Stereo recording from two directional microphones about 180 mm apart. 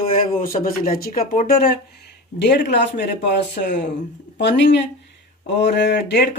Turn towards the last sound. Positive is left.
turn(degrees=70)  # may be behind; listen again after turning